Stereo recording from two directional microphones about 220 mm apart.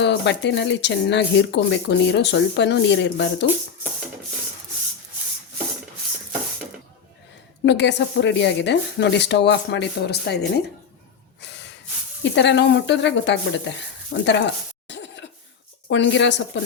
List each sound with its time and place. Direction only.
0.0 s speech: 55° left (ahead or behind)
7.6 s speech: 50° left (ahead or behind)
11.3 s gasp: 50° left (ahead or behind)
12.2 s speech: 55° left (ahead or behind)